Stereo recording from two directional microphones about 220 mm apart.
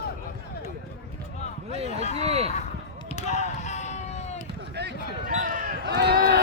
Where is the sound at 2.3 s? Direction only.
30° right (ahead or behind).